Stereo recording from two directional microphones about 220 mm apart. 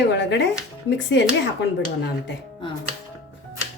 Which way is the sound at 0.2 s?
55° left (ahead or behind).